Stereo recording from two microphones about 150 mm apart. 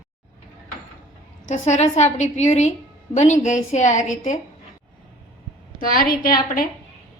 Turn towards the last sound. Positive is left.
turn(degrees=75)  # may be behind; listen again after turning